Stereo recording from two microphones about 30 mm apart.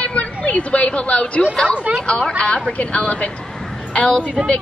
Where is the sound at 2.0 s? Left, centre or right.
Left.